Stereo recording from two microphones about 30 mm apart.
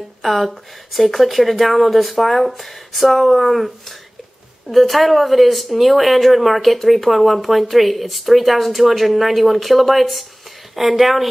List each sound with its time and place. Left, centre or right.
0.2 s speech: centre